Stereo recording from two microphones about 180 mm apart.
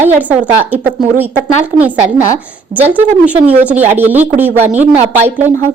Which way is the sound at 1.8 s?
10° right (ahead or behind).